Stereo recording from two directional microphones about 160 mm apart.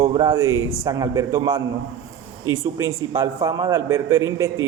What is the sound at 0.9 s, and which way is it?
Speech, 20° right (ahead or behind).